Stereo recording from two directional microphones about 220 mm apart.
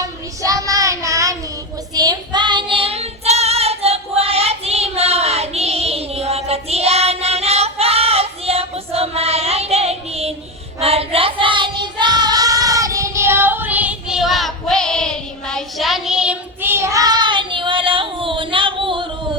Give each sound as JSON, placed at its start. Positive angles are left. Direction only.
{"t": 0.4, "sound": "child singing", "side_deg": -15}